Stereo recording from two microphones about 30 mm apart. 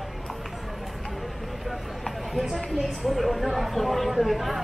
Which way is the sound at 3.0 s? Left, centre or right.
Centre.